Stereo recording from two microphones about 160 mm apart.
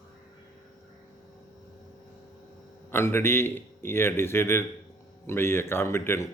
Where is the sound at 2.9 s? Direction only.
15° left (ahead or behind).